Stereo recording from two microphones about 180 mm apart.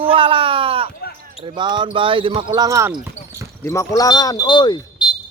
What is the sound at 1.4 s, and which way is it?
Speech, 25° right (ahead or behind).